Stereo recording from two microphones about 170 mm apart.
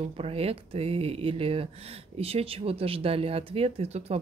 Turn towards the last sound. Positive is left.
turn(degrees=-40)  # may be behind; listen again after turning